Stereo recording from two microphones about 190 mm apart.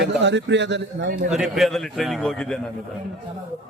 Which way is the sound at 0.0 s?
65° right (ahead or behind).